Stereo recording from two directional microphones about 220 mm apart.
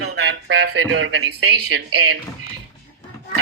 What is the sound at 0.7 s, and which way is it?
Speech, 60° right (ahead or behind).